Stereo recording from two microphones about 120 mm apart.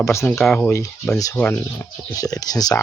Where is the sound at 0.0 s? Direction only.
25° left (ahead or behind).